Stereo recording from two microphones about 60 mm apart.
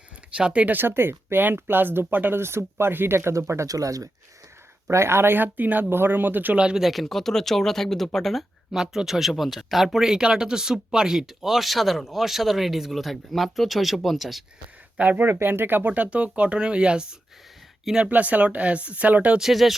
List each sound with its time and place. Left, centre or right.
0.3 s speech: centre
0.8 s speech: right
2.4 s speech: right
3.7 s speech: right
4.9 s speech: right
6.6 s speech: centre
6.8 s speech: centre
8.7 s speech: centre
14.9 s speech: right
15.2 s speech: right; by 17.2 s centre
18.0 s speech: right
19.4 s speech: centre